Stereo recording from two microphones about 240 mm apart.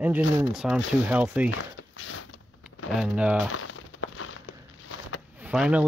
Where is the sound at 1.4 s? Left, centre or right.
Left.